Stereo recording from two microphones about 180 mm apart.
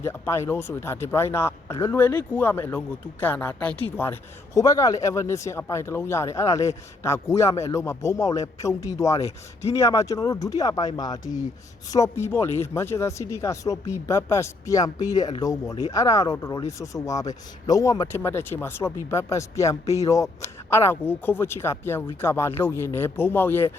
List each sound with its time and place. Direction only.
0.0 s speech: 15° left (ahead or behind)